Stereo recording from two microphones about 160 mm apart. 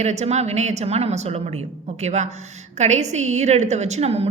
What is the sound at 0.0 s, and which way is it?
A woman's voice, 45° right (ahead or behind).